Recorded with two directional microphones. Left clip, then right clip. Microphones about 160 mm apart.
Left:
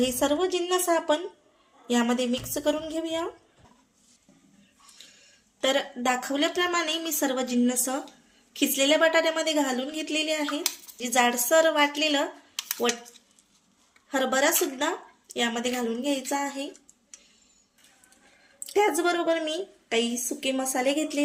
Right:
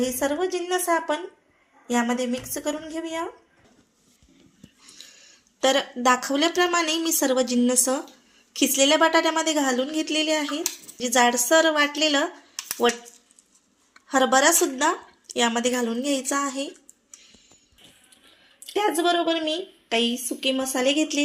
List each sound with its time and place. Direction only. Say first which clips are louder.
0.2 s a woman's voice: even; centre (ahead or behind)
2.0 s a woman's voice: right 1 dB; 15° left (ahead or behind)
3.0 s a woman's voice: even; centre (ahead or behind)
5.5 s a woman's voice: right 4 dB; 35° right (ahead or behind)
14.1 s a woman's voice: right 5 dB; 35° right (ahead or behind)
18.7 s a woman's voice: right 1 dB; 40° right (ahead or behind)